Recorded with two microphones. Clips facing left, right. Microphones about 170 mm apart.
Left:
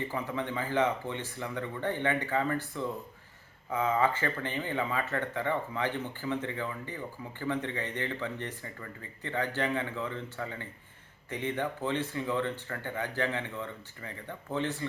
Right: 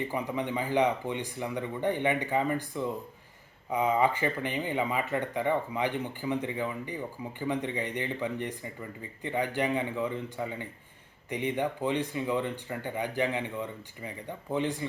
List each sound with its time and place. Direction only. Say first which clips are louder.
0.1 s speech: right 2 dB; 15° right (ahead or behind)